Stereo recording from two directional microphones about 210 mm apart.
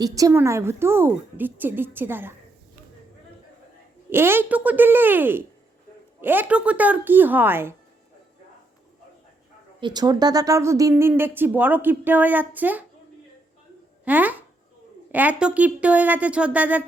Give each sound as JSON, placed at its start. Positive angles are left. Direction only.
{"t": 0.0, "sound": "speech", "side_deg": -15}
{"t": 4.1, "sound": "speech", "side_deg": -10}
{"t": 9.8, "sound": "speech", "side_deg": -20}
{"t": 14.0, "sound": "speech", "side_deg": -10}